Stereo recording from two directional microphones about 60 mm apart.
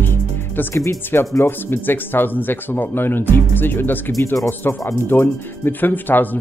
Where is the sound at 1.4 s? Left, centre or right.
Left.